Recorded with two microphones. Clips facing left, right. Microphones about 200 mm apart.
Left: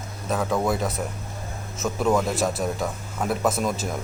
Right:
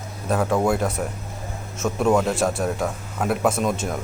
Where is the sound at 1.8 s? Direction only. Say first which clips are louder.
Right 3 dB; centre (ahead or behind).